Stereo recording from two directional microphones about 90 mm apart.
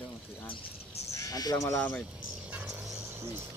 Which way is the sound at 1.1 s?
40° left (ahead or behind).